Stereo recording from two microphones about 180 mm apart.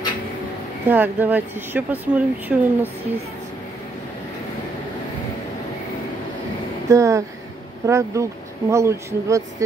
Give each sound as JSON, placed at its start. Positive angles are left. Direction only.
{"t": 0.8, "sound": "speech", "side_deg": -10}
{"t": 6.9, "sound": "speech", "side_deg": -15}